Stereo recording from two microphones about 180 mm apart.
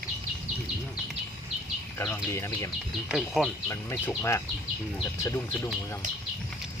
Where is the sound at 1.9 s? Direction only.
15° left (ahead or behind).